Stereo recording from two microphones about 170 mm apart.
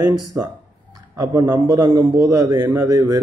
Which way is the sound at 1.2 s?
20° right (ahead or behind).